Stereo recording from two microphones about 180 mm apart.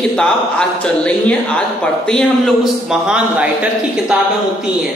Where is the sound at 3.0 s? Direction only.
5° right (ahead or behind).